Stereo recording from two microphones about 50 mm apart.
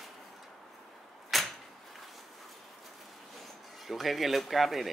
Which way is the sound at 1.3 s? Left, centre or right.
Centre.